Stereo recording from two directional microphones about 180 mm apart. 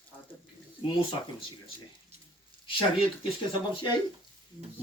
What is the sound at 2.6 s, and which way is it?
Speech, 30° left (ahead or behind).